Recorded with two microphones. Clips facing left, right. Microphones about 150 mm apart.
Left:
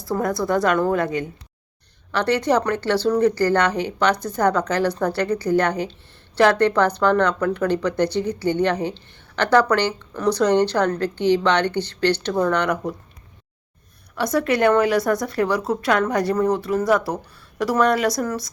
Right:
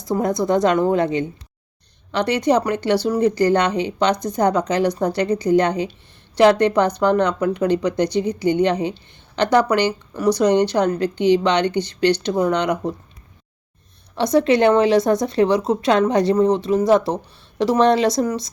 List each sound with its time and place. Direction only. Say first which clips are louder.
0.0 s a woman's voice: right 3 dB; 20° right (ahead or behind)
14.2 s a woman's voice: right 4 dB; 25° right (ahead or behind)